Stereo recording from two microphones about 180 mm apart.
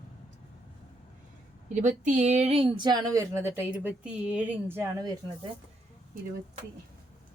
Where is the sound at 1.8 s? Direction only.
45° right (ahead or behind); by 5.1 s 15° right (ahead or behind).